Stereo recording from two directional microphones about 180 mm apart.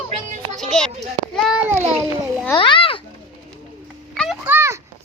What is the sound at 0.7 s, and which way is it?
A child's voice, centre (ahead or behind).